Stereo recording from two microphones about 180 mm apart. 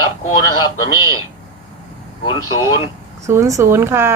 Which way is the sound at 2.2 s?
25° left (ahead or behind).